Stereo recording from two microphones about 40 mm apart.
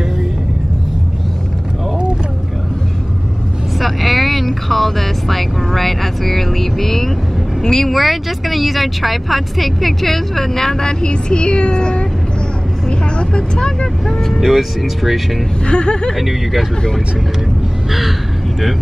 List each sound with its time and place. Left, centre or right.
3.8 s vehicle: centre
7.6 s speech: centre
7.9 s speech: centre; by 12.1 s left
13.2 s speech: left
14.0 s speech: centre
15.6 s speech: left
16.2 s speech: centre